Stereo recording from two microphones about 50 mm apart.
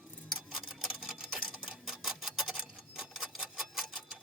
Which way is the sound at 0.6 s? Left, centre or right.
Centre.